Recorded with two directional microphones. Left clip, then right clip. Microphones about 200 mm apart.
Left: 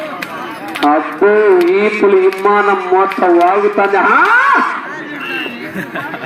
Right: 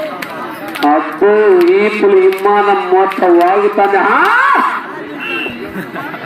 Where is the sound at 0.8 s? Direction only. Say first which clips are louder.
Even; 30° left (ahead or behind).